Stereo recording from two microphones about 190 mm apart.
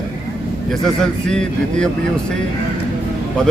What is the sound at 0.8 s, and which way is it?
Speech, 5° left (ahead or behind).